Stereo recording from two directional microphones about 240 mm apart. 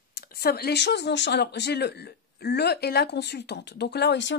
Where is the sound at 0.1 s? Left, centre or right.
Left.